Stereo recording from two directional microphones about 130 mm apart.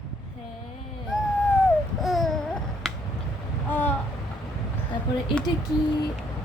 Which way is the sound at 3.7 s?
15° left (ahead or behind).